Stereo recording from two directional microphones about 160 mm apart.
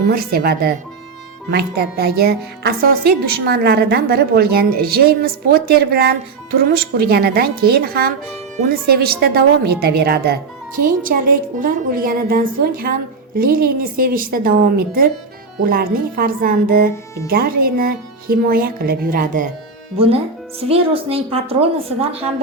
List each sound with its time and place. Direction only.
0.1 s speech: 75° right (ahead or behind)
10.8 s speech: 60° right (ahead or behind)
20.7 s speech: 35° right (ahead or behind)